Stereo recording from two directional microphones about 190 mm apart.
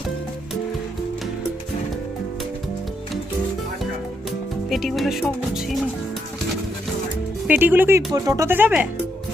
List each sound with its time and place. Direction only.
4.7 s speech: centre (ahead or behind)
7.4 s speech: 10° right (ahead or behind)